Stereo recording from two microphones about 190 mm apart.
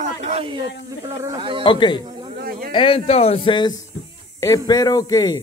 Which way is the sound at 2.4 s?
50° right (ahead or behind).